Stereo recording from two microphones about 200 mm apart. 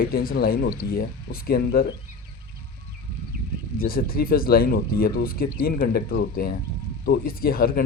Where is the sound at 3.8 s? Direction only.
45° left (ahead or behind).